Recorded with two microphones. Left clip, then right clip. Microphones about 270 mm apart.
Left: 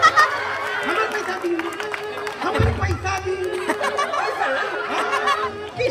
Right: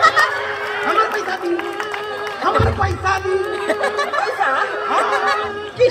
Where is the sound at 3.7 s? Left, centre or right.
Centre.